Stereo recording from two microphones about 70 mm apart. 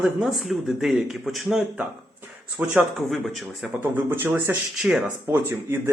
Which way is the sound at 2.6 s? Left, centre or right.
Right.